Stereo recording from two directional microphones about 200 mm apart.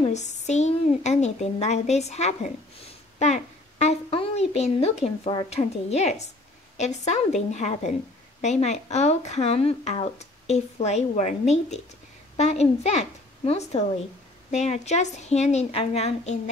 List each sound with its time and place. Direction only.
0.0 s a woman's voice: 35° left (ahead or behind)